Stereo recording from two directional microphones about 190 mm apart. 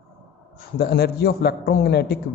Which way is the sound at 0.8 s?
55° left (ahead or behind).